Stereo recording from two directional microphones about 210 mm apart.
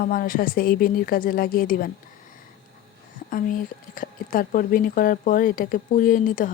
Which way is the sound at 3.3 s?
40° left (ahead or behind).